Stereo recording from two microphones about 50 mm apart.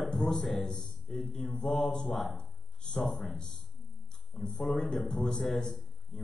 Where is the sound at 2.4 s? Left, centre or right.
Centre.